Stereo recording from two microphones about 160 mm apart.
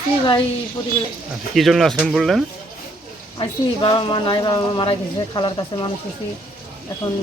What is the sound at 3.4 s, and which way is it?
Speech, 30° left (ahead or behind).